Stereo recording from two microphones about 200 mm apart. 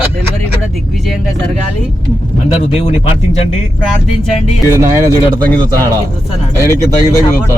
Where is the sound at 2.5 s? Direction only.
30° left (ahead or behind).